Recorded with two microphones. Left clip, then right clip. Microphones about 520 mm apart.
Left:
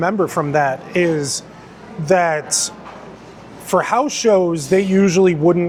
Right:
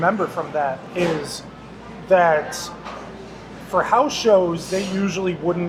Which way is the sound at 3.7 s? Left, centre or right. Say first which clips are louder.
Left 1 dB; left.